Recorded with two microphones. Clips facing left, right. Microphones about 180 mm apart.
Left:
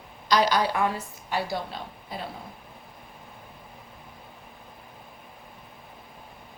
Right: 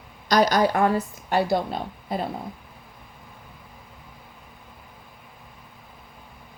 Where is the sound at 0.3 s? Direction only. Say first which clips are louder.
Right 4 dB; 45° right (ahead or behind).